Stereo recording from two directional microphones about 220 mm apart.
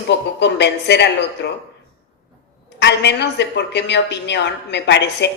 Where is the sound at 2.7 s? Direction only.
50° left (ahead or behind).